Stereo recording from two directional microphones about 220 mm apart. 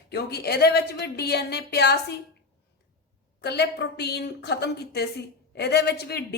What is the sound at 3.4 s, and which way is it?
A woman's voice, 50° left (ahead or behind).